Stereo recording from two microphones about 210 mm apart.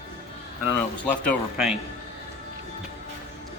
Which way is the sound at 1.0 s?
Centre (ahead or behind).